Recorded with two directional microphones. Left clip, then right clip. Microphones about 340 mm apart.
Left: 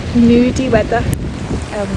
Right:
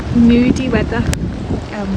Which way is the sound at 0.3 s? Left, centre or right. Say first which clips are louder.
Left 3 dB; centre.